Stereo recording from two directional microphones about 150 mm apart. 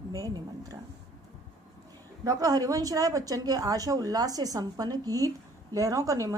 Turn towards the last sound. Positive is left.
turn(degrees=-25)  # may be behind; listen again after turning